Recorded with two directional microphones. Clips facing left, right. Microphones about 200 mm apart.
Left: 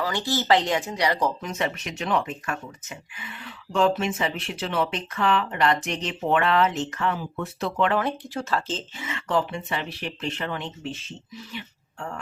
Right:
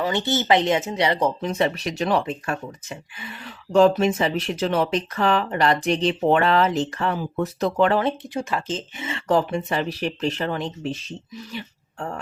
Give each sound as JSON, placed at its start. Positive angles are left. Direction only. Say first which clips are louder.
{"t": 0.0, "sound": "speech", "louder": "right 4 dB", "side_deg": -25}
{"t": 8.3, "sound": "speech", "louder": "right 2 dB", "side_deg": -15}
{"t": 9.0, "sound": "speech", "louder": "right 5 dB", "side_deg": -30}